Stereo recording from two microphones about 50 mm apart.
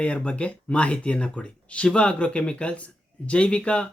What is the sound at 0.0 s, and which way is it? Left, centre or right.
Speech, left.